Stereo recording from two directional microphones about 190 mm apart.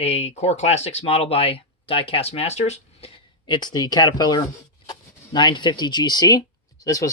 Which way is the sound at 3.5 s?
20° left (ahead or behind).